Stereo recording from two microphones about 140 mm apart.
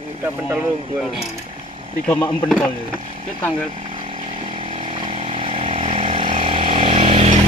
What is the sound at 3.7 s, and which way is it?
Chainsaw, 40° right (ahead or behind).